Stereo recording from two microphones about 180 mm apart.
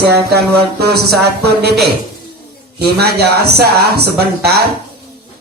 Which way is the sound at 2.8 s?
60° right (ahead or behind).